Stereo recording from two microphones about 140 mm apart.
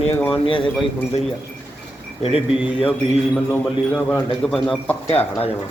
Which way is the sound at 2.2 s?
45° left (ahead or behind).